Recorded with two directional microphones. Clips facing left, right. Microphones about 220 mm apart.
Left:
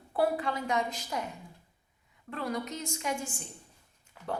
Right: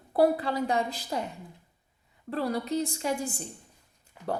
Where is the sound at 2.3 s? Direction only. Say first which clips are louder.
Right 5 dB; 35° right (ahead or behind).